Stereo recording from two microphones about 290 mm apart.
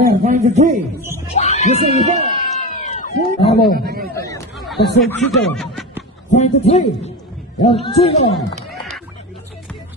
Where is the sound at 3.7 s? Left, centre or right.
Right.